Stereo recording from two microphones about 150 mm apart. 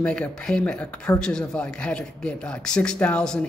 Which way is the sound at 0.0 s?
5° left (ahead or behind).